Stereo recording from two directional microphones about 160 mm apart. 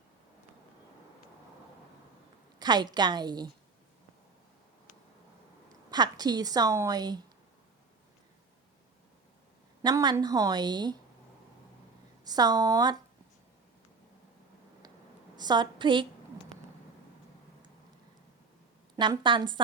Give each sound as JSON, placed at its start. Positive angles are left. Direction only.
{"t": 2.6, "sound": "a woman's voice", "side_deg": -25}
{"t": 5.9, "sound": "a woman's voice", "side_deg": -25}
{"t": 9.8, "sound": "a woman's voice", "side_deg": -25}
{"t": 12.2, "sound": "a woman's voice", "side_deg": -25}
{"t": 15.4, "sound": "a woman's voice", "side_deg": -25}
{"t": 18.9, "sound": "a woman's voice", "side_deg": -30}